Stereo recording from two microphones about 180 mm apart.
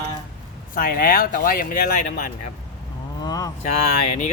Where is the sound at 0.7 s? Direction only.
55° left (ahead or behind).